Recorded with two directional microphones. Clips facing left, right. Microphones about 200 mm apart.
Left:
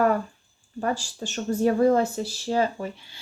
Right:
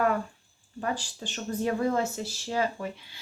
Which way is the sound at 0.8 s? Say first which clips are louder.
Left 5 dB; 45° left (ahead or behind).